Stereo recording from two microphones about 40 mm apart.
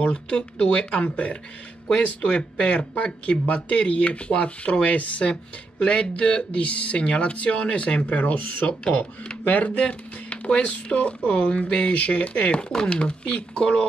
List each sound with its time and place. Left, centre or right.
0.0 s speech: left
9.8 s speech: left